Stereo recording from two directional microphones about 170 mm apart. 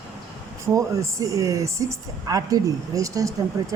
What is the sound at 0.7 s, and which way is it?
A woman's voice, 20° right (ahead or behind).